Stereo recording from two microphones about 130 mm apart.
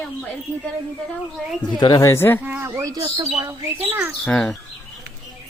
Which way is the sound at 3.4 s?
15° right (ahead or behind).